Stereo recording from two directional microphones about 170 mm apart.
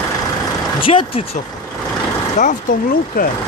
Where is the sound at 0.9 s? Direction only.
40° left (ahead or behind).